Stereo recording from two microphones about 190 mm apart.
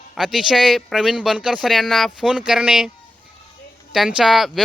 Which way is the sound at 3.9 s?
Centre (ahead or behind).